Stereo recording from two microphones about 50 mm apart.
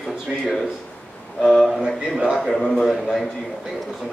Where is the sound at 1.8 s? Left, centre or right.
Centre.